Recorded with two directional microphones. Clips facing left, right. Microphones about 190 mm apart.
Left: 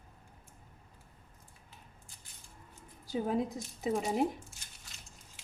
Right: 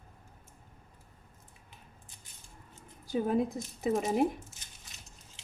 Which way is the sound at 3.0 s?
55° right (ahead or behind).